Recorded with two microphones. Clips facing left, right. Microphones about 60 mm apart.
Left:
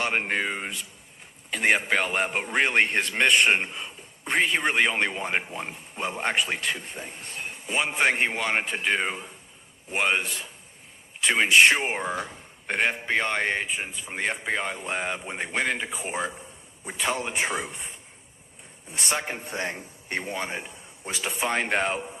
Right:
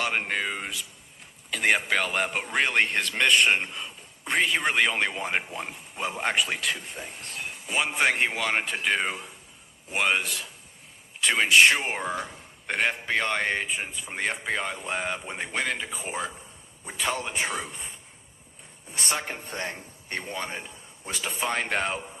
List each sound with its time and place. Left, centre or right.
0.0 s a man's voice: centre
19.5 s a man's voice: left